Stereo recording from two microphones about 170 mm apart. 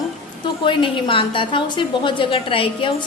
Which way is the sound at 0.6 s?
30° left (ahead or behind).